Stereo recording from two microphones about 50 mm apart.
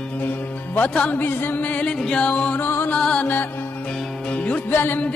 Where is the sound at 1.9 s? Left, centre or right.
Centre.